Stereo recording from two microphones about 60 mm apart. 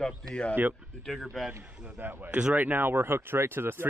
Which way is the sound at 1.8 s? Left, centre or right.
Right.